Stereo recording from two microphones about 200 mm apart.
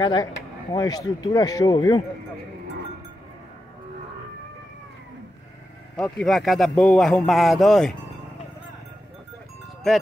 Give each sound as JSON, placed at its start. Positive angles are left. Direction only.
{"t": 0.0, "sound": "speech", "side_deg": 20}
{"t": 5.9, "sound": "speech", "side_deg": 5}